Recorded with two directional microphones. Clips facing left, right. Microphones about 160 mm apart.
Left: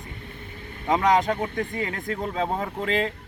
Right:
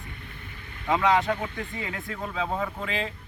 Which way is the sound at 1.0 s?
40° left (ahead or behind).